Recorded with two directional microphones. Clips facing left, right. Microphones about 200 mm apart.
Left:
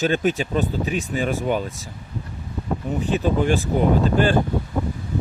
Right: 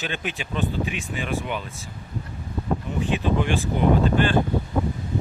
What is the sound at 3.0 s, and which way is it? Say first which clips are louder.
Speech: left 4 dB; 40° left (ahead or behind).